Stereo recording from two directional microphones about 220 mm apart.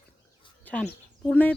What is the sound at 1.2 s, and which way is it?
Speech, 5° left (ahead or behind).